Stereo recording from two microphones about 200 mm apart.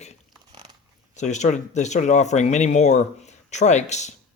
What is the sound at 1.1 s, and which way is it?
Speech, 35° left (ahead or behind).